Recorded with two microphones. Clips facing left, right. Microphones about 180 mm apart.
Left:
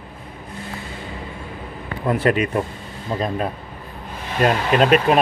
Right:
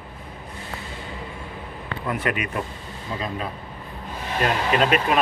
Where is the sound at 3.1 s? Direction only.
45° left (ahead or behind).